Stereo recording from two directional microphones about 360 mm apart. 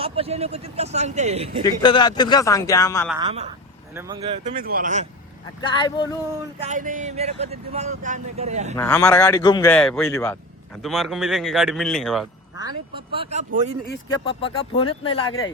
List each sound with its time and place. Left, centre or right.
0.0 s speech: centre
1.6 s a man's voice: centre
3.2 s speech: centre
5.5 s a man's voice: centre
6.6 s speech: centre
8.7 s speech: centre
12.5 s speech: centre
14.3 s a man's voice: centre
15.3 s speech: left